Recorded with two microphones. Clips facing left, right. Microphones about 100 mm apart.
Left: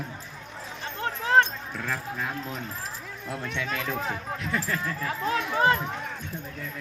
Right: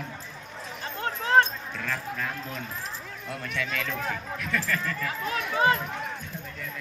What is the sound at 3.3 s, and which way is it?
Speech, 25° left (ahead or behind).